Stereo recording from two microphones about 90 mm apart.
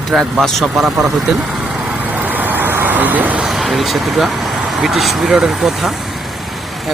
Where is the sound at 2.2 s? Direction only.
20° right (ahead or behind).